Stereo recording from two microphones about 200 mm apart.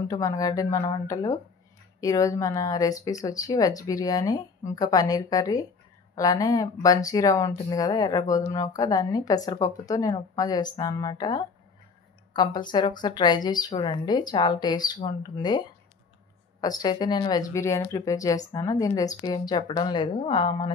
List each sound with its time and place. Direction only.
0.1 s speech: 20° left (ahead or behind)
16.6 s speech: 20° left (ahead or behind)